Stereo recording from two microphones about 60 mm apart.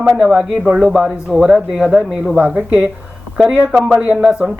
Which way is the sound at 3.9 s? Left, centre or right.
Centre.